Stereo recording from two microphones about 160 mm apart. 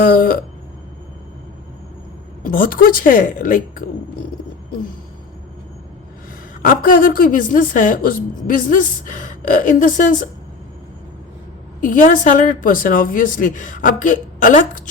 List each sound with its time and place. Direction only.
0.0 s a woman's voice: 60° left (ahead or behind)
2.4 s a woman's voice: 65° left (ahead or behind)
6.6 s a woman's voice: 60° left (ahead or behind)
11.8 s a woman's voice: 55° left (ahead or behind)